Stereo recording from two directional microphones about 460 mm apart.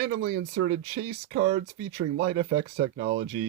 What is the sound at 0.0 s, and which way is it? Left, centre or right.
Speech, right.